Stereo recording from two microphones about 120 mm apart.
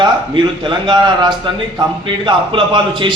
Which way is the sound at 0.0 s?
40° right (ahead or behind).